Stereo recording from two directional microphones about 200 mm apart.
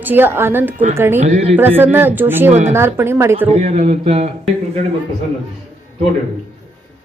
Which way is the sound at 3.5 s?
30° right (ahead or behind).